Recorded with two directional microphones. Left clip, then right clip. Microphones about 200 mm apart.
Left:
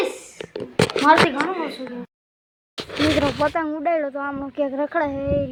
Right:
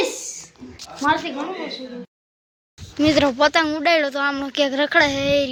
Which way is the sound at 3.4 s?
20° right (ahead or behind).